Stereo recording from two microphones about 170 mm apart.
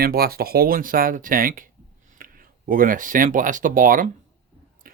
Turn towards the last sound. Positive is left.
turn(degrees=-55)  # may be behind; listen again after turning